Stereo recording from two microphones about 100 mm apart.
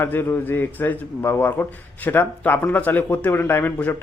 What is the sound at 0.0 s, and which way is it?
A man's voice, 20° left (ahead or behind).